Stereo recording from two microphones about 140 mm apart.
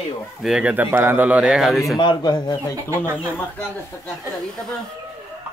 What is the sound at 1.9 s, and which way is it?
Speech, 35° left (ahead or behind).